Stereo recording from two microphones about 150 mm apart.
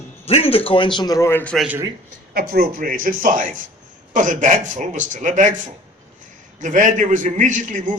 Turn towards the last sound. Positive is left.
turn(degrees=-60)  # may be behind; listen again after turning